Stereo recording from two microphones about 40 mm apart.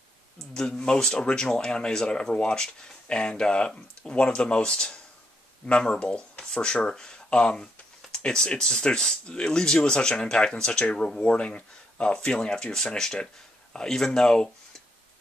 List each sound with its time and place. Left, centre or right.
0.6 s speech: centre
8.1 s a sound: centre
8.5 s speech: centre